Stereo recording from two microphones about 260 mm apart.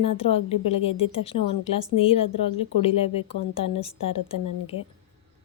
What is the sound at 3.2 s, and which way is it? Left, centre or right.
A woman's voice, left.